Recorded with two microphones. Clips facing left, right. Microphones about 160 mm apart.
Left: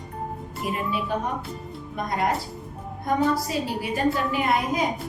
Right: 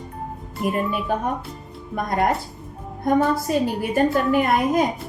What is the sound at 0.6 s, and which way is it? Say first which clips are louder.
A woman's voice: right 5 dB; 50° right (ahead or behind).